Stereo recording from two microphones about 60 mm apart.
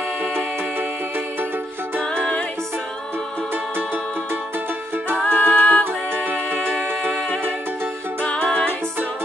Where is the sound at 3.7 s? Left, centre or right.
Right.